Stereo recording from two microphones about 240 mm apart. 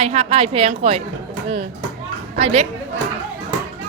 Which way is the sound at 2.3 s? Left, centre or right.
Right.